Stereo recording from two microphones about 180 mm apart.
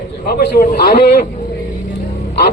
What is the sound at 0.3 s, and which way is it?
Speech, 60° left (ahead or behind).